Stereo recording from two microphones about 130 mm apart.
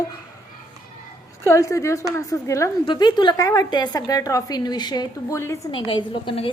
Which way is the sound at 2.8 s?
35° left (ahead or behind).